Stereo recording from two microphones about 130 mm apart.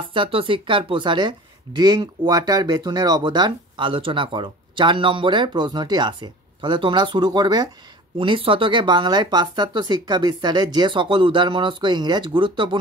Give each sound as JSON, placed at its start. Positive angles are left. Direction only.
{"t": 0.1, "sound": "speech", "side_deg": -40}
{"t": 8.2, "sound": "speech", "side_deg": -40}